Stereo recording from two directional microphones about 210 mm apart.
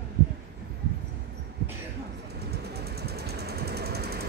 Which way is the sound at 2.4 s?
50° right (ahead or behind).